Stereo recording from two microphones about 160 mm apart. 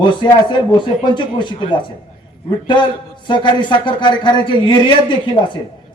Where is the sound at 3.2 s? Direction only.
30° left (ahead or behind).